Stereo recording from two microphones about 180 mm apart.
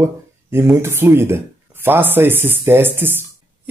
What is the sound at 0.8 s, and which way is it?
Speech, 15° right (ahead or behind).